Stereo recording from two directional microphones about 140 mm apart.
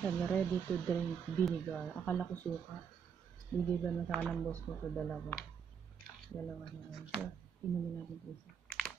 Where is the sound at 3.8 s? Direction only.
5° left (ahead or behind).